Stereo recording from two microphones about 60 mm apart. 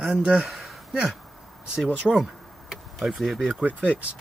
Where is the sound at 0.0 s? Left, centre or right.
Centre.